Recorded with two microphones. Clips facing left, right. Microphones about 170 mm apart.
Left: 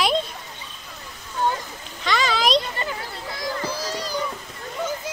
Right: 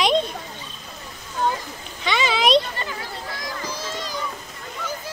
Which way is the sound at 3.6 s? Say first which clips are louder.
Left 3 dB; 35° left (ahead or behind).